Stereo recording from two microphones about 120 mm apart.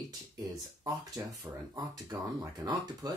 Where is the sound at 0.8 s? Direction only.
30° right (ahead or behind).